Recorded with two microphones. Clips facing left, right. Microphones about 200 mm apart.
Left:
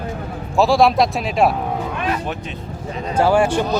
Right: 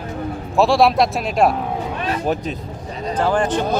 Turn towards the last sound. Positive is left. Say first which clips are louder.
# left 3 dB
turn(degrees=10)  # may be behind; listen again after turning